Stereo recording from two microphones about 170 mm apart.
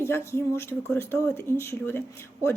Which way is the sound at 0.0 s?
15° left (ahead or behind).